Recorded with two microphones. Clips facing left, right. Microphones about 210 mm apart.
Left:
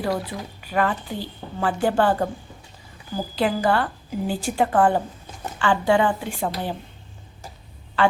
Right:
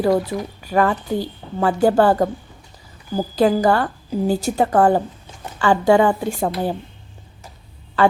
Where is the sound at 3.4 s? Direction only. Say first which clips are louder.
Right 5 dB; 40° right (ahead or behind).